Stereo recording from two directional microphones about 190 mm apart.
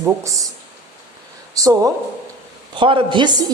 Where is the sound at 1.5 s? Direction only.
15° right (ahead or behind).